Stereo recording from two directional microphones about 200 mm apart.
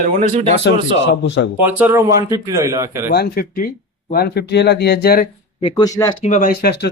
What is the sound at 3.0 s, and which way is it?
Speech, 50° left (ahead or behind).